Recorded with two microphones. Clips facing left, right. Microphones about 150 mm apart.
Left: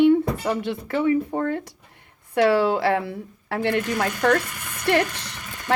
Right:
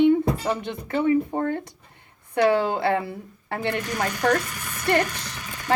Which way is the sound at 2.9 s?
70° left (ahead or behind).